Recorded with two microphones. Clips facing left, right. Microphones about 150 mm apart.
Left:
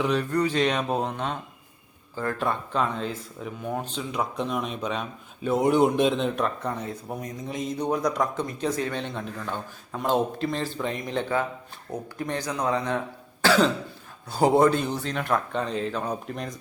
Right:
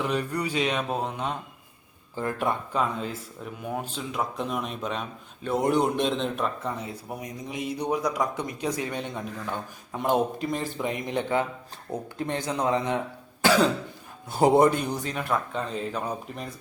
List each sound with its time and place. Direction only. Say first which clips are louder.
0.0 s speech: left 4 dB; 10° right (ahead or behind)
2.7 s speech: left 1 dB; 5° right (ahead or behind)
13.4 s cough: even; 15° right (ahead or behind)
14.3 s speech: even; 20° right (ahead or behind); by 16.6 s 5° right (ahead or behind)